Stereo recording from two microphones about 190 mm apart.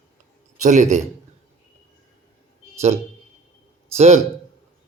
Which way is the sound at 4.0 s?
35° right (ahead or behind).